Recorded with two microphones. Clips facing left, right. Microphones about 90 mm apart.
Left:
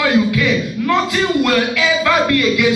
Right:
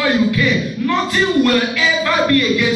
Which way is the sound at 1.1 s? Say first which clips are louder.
Right 1 dB; 90° left.